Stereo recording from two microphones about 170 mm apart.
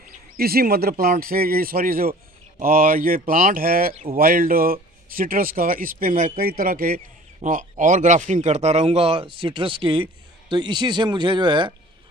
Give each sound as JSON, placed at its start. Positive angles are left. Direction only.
{"t": 0.4, "sound": "speech", "side_deg": -65}